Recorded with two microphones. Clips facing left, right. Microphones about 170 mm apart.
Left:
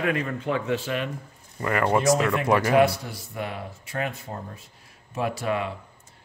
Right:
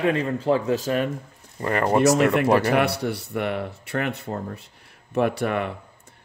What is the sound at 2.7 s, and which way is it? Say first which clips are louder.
Speech: left 1 dB; 65° right (ahead or behind).